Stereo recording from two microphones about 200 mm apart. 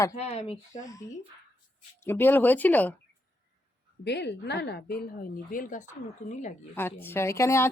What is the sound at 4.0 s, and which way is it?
A woman's voice, 55° left (ahead or behind).